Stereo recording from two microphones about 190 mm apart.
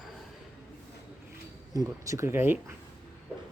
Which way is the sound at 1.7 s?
20° right (ahead or behind).